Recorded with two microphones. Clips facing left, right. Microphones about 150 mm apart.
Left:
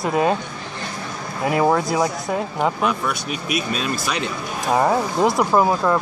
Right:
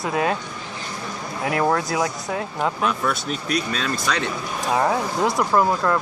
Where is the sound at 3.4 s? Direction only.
15° left (ahead or behind).